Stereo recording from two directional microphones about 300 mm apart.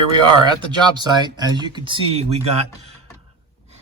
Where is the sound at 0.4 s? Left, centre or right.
Centre.